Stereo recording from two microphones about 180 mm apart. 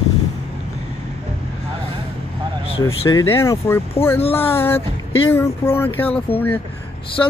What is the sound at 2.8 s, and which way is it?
Speech, 20° left (ahead or behind).